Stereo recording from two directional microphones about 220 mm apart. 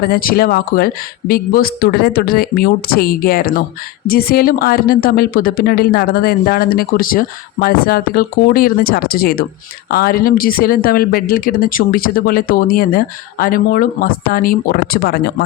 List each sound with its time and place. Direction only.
0.1 s a woman's voice: 40° left (ahead or behind)